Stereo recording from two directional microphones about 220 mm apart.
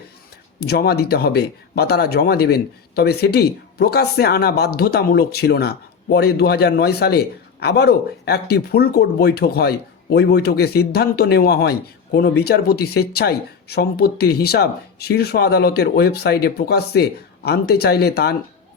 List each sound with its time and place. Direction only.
0.6 s speech: 45° left (ahead or behind)